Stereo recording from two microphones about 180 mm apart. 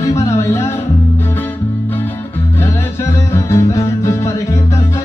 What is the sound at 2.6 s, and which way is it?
Music, 15° left (ahead or behind).